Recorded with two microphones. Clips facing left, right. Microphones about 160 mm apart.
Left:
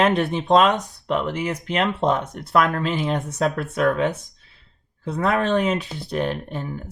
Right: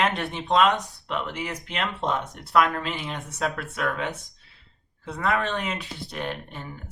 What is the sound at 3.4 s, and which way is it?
Speech, 20° left (ahead or behind).